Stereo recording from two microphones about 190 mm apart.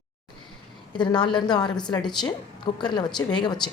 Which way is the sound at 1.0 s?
25° left (ahead or behind).